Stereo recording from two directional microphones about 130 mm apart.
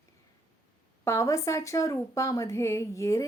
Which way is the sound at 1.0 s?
20° left (ahead or behind).